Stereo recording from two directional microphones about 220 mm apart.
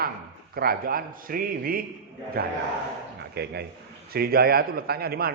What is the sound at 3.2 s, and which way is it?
A man's voice, 45° right (ahead or behind).